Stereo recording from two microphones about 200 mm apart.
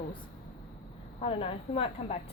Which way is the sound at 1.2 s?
30° left (ahead or behind).